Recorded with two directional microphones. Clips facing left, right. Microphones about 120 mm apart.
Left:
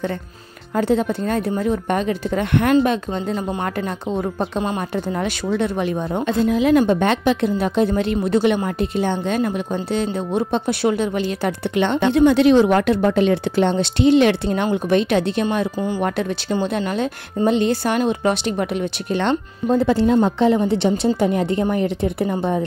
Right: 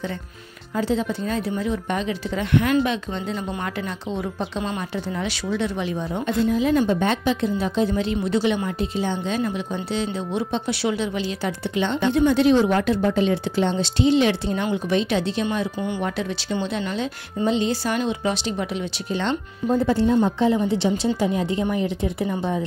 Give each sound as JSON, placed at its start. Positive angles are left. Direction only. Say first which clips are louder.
{"t": 0.7, "sound": "speech", "louder": "left 5 dB", "side_deg": 55}
{"t": 6.5, "sound": "a woman's voice", "louder": "left 6 dB", "side_deg": 75}
{"t": 6.8, "sound": "speech", "louder": "left 4 dB", "side_deg": 65}
{"t": 20.2, "sound": "speech", "louder": "left 3 dB", "side_deg": 70}